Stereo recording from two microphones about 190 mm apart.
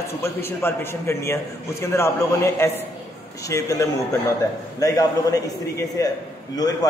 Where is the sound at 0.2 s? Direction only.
15° left (ahead or behind).